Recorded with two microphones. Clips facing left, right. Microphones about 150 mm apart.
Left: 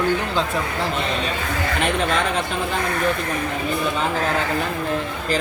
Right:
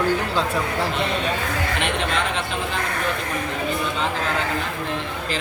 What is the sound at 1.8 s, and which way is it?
Speech, 40° left (ahead or behind).